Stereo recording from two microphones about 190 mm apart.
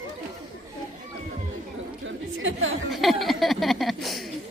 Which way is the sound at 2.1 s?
90° right.